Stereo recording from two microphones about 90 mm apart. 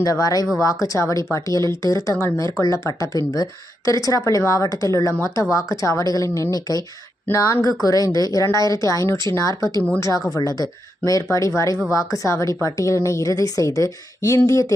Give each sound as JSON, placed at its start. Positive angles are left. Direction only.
{"t": 0.0, "sound": "a woman's voice", "side_deg": 40}